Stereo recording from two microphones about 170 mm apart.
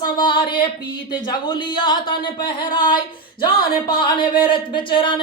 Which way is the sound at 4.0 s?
30° left (ahead or behind).